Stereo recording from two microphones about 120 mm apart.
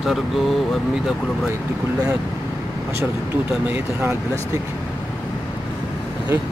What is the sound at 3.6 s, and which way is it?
Speech, 15° right (ahead or behind).